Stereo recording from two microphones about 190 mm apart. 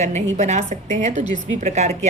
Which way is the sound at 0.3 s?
40° right (ahead or behind).